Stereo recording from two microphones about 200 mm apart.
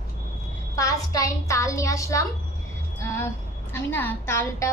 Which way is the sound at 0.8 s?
15° left (ahead or behind).